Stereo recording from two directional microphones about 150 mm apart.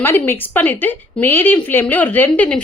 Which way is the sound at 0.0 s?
15° left (ahead or behind).